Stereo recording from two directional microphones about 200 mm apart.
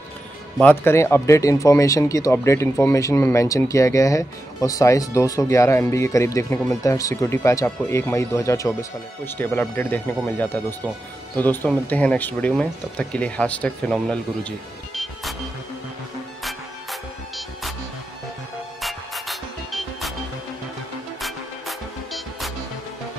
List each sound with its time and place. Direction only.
0.6 s speech: 10° left (ahead or behind)
16.4 s music: centre (ahead or behind)
18.8 s music: centre (ahead or behind)
21.2 s music: centre (ahead or behind)